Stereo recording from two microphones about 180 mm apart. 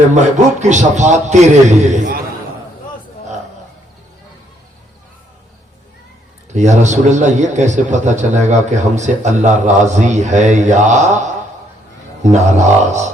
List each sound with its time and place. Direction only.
0.1 s a man's voice: 40° right (ahead or behind)
6.5 s a man's voice: 40° right (ahead or behind)